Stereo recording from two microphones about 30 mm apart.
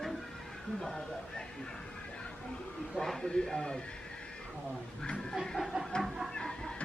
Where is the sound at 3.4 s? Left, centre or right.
Left.